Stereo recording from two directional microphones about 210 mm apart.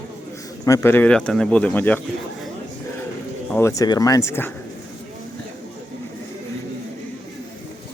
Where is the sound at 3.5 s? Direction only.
15° left (ahead or behind).